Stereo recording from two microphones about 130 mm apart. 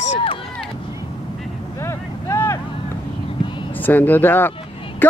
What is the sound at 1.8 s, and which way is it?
Vehicle, 20° left (ahead or behind).